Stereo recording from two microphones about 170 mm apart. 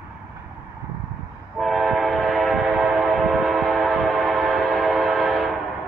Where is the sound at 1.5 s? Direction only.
Centre (ahead or behind).